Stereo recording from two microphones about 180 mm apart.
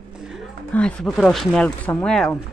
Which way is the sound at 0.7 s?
5° left (ahead or behind).